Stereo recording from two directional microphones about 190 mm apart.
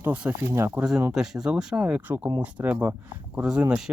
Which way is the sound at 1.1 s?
Centre (ahead or behind).